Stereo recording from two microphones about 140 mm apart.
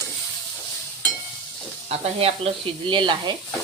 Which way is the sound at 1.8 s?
45° right (ahead or behind).